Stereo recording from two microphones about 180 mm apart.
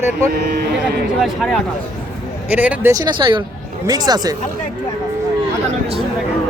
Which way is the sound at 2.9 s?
25° right (ahead or behind).